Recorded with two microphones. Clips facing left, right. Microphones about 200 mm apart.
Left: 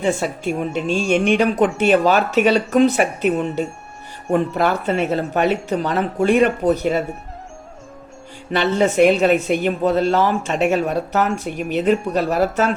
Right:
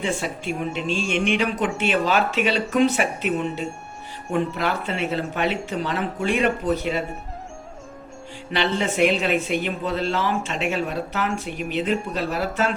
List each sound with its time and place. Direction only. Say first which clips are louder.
0.0 s speech: left 6 dB; 40° left (ahead or behind)
8.5 s speech: left 6 dB; 45° left (ahead or behind)